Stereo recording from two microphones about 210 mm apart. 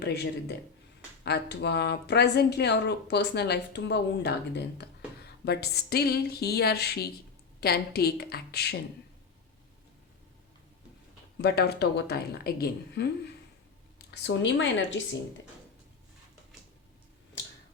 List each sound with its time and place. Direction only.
0.0 s speech: 50° left (ahead or behind)
11.3 s speech: 50° left (ahead or behind)
14.1 s a woman's voice: 60° left (ahead or behind)